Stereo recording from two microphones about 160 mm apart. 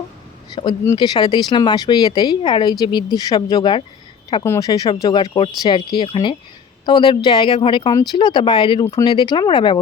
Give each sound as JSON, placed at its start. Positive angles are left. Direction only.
{"t": 0.5, "sound": "speech", "side_deg": 30}
{"t": 4.4, "sound": "speech", "side_deg": 20}